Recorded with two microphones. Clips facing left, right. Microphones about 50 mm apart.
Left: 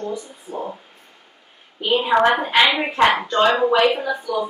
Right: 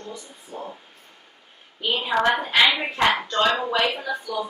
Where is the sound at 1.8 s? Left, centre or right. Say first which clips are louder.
Left 6 dB; centre.